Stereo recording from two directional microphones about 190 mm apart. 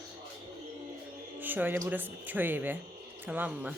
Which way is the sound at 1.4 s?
10° right (ahead or behind).